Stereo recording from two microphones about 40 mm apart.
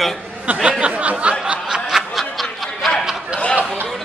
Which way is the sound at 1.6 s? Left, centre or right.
Centre.